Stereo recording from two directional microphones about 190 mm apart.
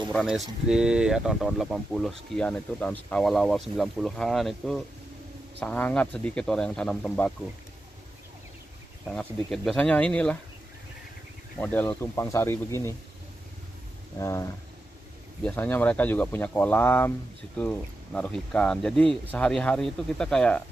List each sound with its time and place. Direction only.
0.1 s speech: 5° left (ahead or behind)
9.0 s speech: centre (ahead or behind)
11.6 s speech: 10° left (ahead or behind)
14.2 s speech: 15° left (ahead or behind)